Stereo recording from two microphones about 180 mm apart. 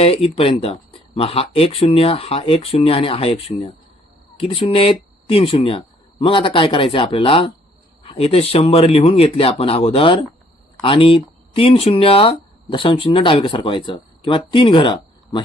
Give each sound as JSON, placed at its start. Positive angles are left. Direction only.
{"t": 0.0, "sound": "speech", "side_deg": 35}